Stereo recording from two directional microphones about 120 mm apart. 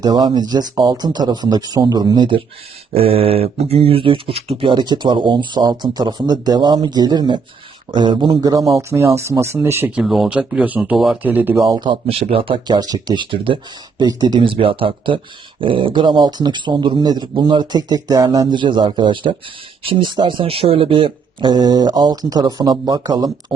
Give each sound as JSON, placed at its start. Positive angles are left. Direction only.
{"t": 0.0, "sound": "speech", "side_deg": -35}
{"t": 2.9, "sound": "speech", "side_deg": -55}
{"t": 9.9, "sound": "speech", "side_deg": -5}
{"t": 10.9, "sound": "speech", "side_deg": 0}
{"t": 11.2, "sound": "speech", "side_deg": -15}
{"t": 11.7, "sound": "speech", "side_deg": -40}
{"t": 12.1, "sound": "speech", "side_deg": -50}
{"t": 14.0, "sound": "speech", "side_deg": -35}